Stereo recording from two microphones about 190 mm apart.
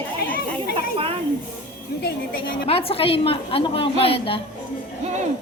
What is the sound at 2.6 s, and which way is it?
A woman's voice, 30° left (ahead or behind).